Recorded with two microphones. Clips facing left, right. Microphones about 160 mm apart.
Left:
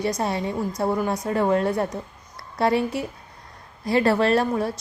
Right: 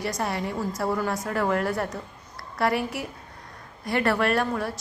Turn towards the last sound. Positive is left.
turn(degrees=25)  # may be behind; listen again after turning